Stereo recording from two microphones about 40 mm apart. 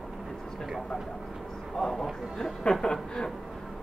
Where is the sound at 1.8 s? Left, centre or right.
Centre.